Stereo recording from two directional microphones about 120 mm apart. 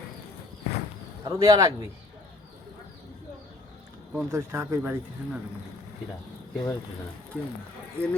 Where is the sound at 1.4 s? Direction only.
25° right (ahead or behind).